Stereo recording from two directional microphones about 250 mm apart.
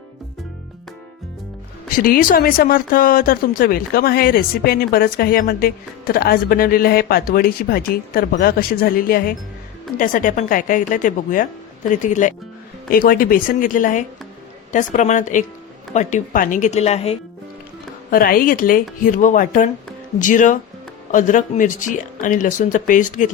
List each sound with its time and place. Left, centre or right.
2.0 s speech: left
18.1 s speech: left